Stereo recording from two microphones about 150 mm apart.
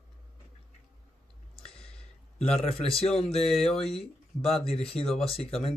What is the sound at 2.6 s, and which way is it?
Speech, 40° left (ahead or behind).